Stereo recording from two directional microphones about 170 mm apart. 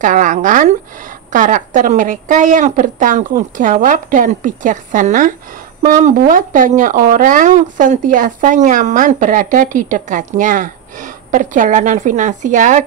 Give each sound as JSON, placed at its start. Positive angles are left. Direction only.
{"t": 0.0, "sound": "speech", "side_deg": -50}